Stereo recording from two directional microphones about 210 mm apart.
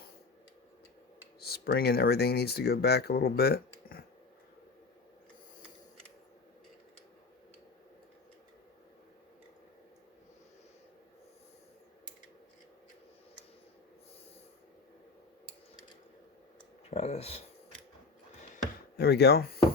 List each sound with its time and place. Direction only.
1.4 s speech: 50° left (ahead or behind)
16.9 s a sound: 30° left (ahead or behind)
18.9 s speech: 50° left (ahead or behind)